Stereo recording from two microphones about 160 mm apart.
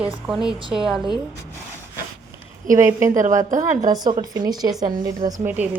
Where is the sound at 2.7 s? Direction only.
20° right (ahead or behind).